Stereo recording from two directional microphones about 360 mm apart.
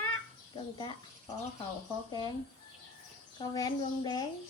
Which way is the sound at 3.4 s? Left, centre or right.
Centre.